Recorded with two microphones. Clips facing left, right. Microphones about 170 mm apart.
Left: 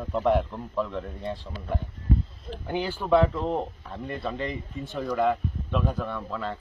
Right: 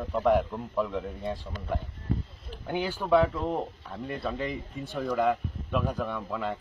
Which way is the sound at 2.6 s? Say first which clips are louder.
Left 1 dB; centre (ahead or behind).